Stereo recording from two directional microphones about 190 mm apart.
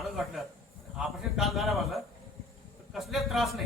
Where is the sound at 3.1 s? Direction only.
Centre (ahead or behind).